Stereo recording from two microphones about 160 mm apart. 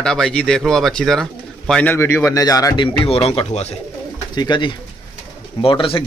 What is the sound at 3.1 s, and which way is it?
Speech, 35° left (ahead or behind).